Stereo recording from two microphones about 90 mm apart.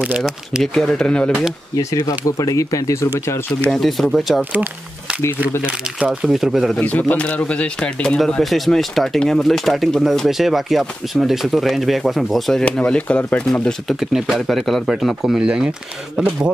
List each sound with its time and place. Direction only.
0.5 s speech: centre (ahead or behind)
1.8 s speech: 35° left (ahead or behind)
3.7 s speech: centre (ahead or behind)
5.7 s speech: 10° right (ahead or behind)
6.8 s speech: 15° left (ahead or behind)
8.2 s speech: centre (ahead or behind)
12.6 s speech: 10° left (ahead or behind)
13.9 s a man's voice: 5° right (ahead or behind)